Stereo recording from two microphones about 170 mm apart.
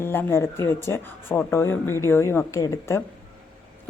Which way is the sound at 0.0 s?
15° left (ahead or behind).